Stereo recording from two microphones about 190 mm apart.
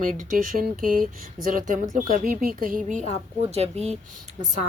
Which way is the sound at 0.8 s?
50° right (ahead or behind).